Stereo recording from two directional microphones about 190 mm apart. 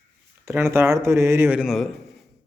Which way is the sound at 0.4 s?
15° right (ahead or behind).